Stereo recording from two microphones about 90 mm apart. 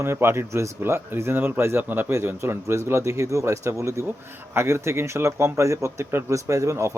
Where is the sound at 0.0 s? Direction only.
25° right (ahead or behind).